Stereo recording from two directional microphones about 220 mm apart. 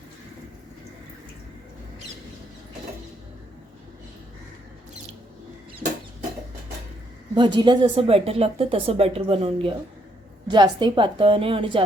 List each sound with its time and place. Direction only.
7.3 s speech: 20° right (ahead or behind)